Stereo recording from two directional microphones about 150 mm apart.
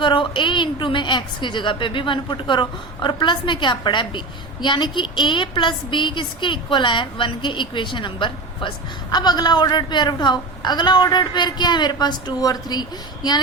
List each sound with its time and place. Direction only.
0.0 s a woman's voice: 35° left (ahead or behind)